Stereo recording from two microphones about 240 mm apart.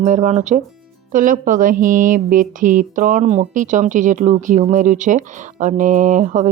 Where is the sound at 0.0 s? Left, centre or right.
Right.